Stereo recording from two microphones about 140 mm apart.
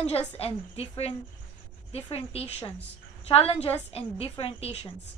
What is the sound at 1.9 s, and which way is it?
A woman's voice, 45° left (ahead or behind).